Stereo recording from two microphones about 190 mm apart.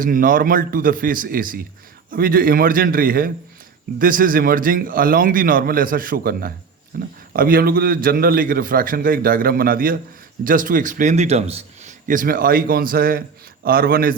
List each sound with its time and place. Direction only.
0.0 s a man's voice: 45° right (ahead or behind)
6.9 s a sound: 50° right (ahead or behind)
7.3 s a man's voice: 50° right (ahead or behind)